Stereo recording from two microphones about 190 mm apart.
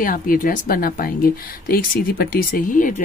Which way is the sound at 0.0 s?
45° left (ahead or behind).